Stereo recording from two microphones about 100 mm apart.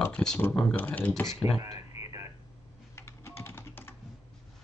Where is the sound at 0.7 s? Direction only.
20° left (ahead or behind).